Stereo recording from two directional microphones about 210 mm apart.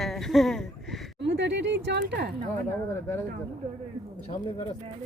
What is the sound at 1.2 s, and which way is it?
Speech, 55° right (ahead or behind).